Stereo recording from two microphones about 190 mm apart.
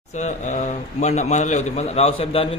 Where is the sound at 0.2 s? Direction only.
40° left (ahead or behind).